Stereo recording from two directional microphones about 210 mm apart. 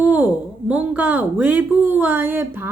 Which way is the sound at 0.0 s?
10° right (ahead or behind).